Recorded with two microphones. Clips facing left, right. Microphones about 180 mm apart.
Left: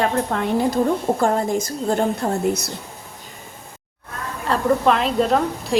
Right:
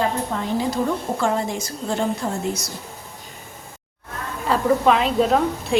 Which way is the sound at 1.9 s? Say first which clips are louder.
Left 3 dB; 50° left (ahead or behind).